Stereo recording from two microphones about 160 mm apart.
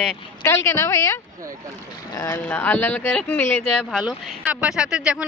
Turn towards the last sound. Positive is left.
turn(degrees=-5)  # may be behind; listen again after turning